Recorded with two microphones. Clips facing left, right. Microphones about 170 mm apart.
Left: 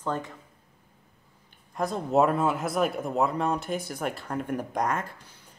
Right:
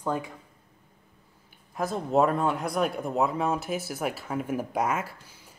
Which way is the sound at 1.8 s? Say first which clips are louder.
Even; centre (ahead or behind).